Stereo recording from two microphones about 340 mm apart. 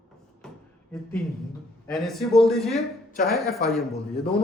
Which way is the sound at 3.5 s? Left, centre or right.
Centre.